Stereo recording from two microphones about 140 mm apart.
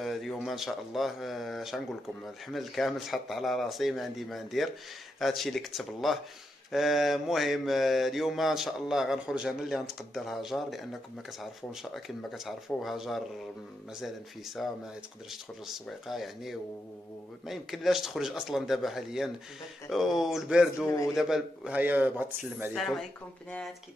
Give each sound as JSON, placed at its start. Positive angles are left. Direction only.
{"t": 0.0, "sound": "mantra", "side_deg": 0}
{"t": 20.8, "sound": "a man's voice", "side_deg": 20}
{"t": 21.1, "sound": "speech", "side_deg": -5}
{"t": 22.8, "sound": "mantra", "side_deg": 5}